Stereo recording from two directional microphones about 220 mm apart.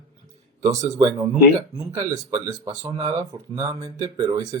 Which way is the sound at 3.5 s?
15° right (ahead or behind).